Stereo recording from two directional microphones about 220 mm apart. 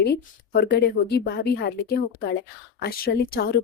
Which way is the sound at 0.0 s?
45° left (ahead or behind).